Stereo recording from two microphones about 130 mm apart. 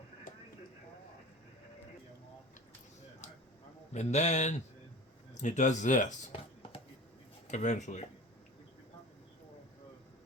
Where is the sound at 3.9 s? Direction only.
60° left (ahead or behind).